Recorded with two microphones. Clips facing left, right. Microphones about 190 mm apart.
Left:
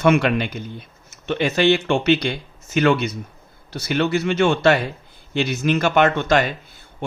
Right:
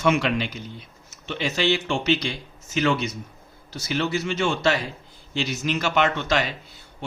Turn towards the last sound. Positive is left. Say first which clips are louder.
# left 6 dB
turn(degrees=50)  # may be behind; listen again after turning